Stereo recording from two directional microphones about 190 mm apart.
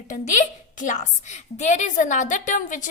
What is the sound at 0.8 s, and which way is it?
A woman's voice, 40° left (ahead or behind).